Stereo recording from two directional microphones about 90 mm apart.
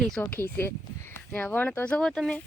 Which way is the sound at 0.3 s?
25° left (ahead or behind).